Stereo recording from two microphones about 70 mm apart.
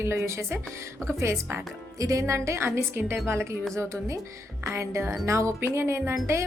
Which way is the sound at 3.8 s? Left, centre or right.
Right.